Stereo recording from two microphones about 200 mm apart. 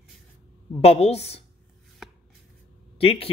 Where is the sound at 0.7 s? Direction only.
30° left (ahead or behind).